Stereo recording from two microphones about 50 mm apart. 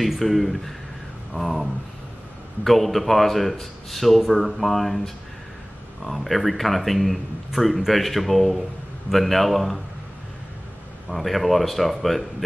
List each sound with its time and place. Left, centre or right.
0.0 s speech: centre
11.1 s speech: centre